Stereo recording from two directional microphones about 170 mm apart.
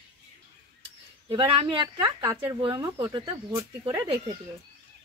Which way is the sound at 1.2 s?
30° right (ahead or behind).